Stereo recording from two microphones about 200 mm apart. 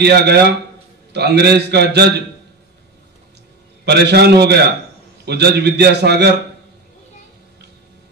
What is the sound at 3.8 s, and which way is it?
A man's voice, 55° right (ahead or behind).